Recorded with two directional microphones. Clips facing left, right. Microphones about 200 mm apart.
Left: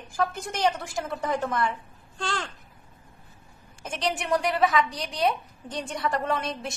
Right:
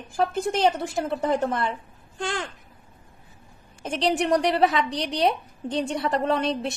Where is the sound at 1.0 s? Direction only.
30° right (ahead or behind).